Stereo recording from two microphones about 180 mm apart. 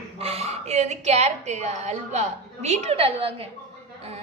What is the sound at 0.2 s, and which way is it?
A woman's voice, 35° right (ahead or behind).